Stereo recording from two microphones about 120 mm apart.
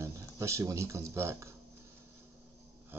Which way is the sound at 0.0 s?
25° right (ahead or behind).